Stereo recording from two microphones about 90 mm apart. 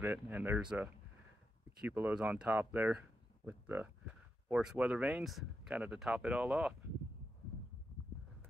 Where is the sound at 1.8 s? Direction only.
20° right (ahead or behind).